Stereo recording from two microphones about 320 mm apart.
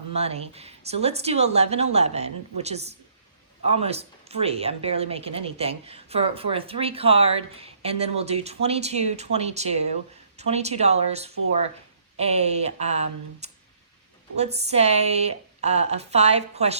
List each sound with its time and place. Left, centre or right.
0.1 s speech: centre